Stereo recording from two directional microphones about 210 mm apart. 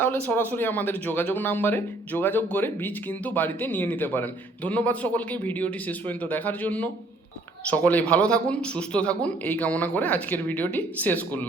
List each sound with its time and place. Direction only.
0.0 s speech: 10° left (ahead or behind)